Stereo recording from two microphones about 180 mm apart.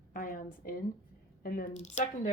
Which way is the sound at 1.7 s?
40° left (ahead or behind).